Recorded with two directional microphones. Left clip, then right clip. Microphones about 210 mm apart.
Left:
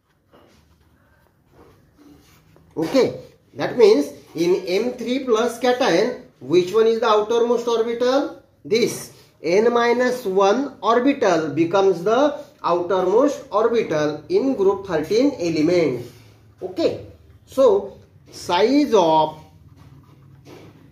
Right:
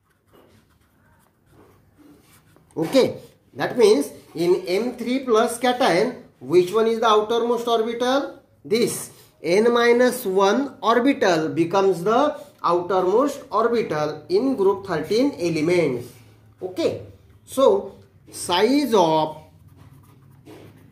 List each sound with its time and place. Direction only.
2.7 s speech: 30° right (ahead or behind)
9.4 s speech: 35° right (ahead or behind)
18.5 s speech: 35° right (ahead or behind)